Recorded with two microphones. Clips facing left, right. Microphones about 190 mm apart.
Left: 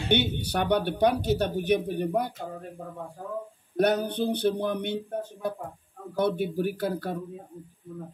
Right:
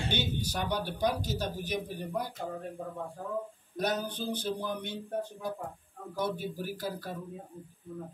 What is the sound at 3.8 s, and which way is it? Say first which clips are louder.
Speech: left 8 dB; 65° left (ahead or behind).